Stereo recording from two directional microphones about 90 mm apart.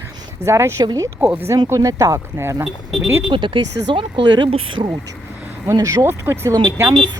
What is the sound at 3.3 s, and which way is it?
Speech, 65° right (ahead or behind).